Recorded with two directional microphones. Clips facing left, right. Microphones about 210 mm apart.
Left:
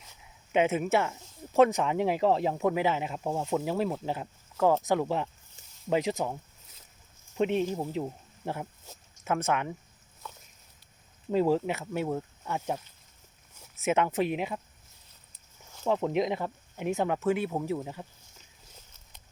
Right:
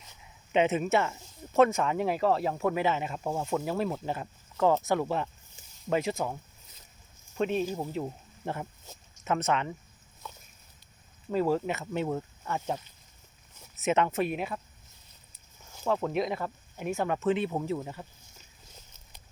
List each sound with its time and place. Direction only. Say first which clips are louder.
0.5 s speech: even; 10° left (ahead or behind)
4.8 s speech: left 1 dB; 15° left (ahead or behind)
7.3 s speech: left 2 dB; 20° left (ahead or behind)
8.0 s speech: even; 10° left (ahead or behind)
11.3 s speech: left 2 dB; 15° left (ahead or behind)
13.8 s speech: even; 10° left (ahead or behind)
15.9 s speech: left 2 dB; 20° left (ahead or behind)